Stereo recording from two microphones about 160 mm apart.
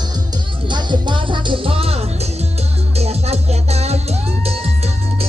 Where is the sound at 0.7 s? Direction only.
30° right (ahead or behind).